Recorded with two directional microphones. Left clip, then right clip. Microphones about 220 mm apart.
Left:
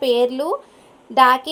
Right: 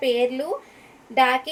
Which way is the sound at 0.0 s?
25° left (ahead or behind).